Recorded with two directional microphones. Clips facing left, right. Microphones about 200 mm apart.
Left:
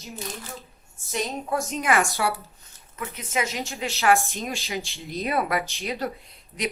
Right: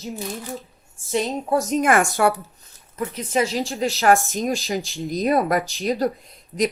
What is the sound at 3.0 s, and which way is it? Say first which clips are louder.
Speech: right 6 dB; 35° right (ahead or behind).